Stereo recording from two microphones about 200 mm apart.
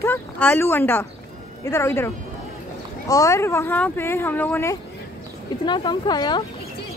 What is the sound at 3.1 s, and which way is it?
Speech, 15° left (ahead or behind).